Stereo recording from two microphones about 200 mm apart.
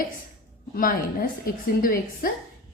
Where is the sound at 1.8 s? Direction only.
45° left (ahead or behind).